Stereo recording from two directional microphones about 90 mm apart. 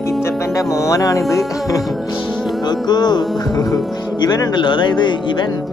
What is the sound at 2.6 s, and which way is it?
Speech, 50° left (ahead or behind).